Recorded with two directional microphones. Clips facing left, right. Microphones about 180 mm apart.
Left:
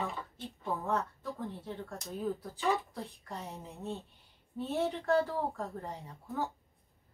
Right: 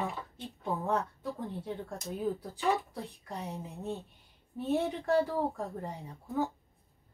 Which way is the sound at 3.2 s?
15° right (ahead or behind).